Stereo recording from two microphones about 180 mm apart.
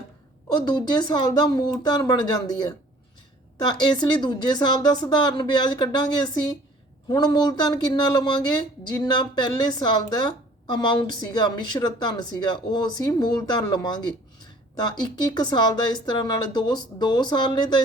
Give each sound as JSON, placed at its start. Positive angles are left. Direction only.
{"t": 0.4, "sound": "a woman's voice", "side_deg": 20}